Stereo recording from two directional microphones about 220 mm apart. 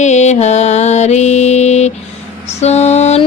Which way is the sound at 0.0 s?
30° left (ahead or behind).